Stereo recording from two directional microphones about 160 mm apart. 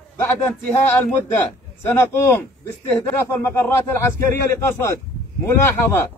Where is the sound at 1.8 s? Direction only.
15° left (ahead or behind).